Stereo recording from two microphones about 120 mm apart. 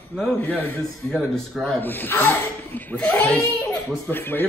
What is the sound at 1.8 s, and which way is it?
A child's voice, 15° left (ahead or behind).